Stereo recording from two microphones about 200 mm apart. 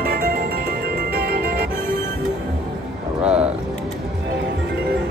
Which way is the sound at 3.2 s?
5° right (ahead or behind).